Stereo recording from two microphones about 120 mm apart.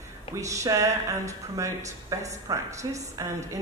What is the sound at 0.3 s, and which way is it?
A woman's voice, 25° right (ahead or behind).